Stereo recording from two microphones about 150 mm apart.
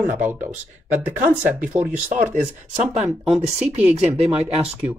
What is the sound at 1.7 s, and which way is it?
Speech, 55° right (ahead or behind).